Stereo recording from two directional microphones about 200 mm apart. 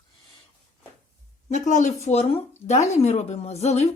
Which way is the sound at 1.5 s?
35° left (ahead or behind).